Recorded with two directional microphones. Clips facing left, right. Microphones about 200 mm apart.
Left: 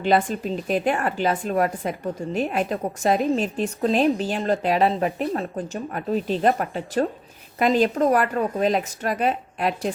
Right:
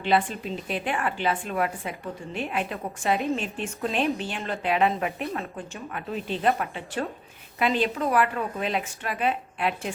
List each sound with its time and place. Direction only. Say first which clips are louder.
0.0 s a woman's voice: left 4 dB; 45° left (ahead or behind)